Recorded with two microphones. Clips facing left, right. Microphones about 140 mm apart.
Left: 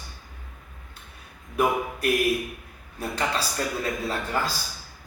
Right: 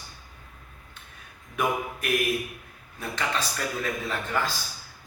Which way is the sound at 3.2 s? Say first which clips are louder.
Left 2 dB; 35° left (ahead or behind).